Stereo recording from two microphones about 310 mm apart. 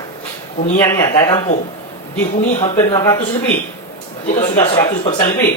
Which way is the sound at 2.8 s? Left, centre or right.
Centre.